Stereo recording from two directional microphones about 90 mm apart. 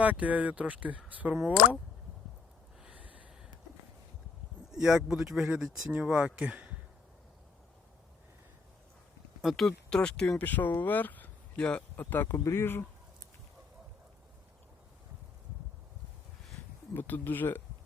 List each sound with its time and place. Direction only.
0.0 s speech: 15° right (ahead or behind)
2.8 s snort: 15° right (ahead or behind)
4.7 s speech: 5° right (ahead or behind)
9.4 s speech: centre (ahead or behind); by 12.8 s 25° left (ahead or behind)
16.9 s speech: 20° left (ahead or behind)